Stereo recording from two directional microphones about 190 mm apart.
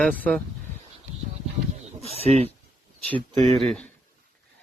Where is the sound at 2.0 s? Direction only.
35° right (ahead or behind).